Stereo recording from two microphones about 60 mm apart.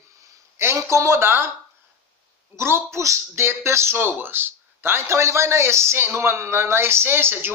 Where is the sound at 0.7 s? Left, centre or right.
Right.